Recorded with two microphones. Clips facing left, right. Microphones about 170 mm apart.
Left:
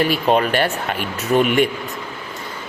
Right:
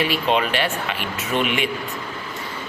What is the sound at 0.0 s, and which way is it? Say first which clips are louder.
Speech: left 4 dB; 45° left (ahead or behind).